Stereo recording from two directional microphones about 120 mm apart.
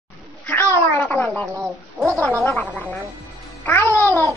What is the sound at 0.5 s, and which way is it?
Speech, 20° left (ahead or behind).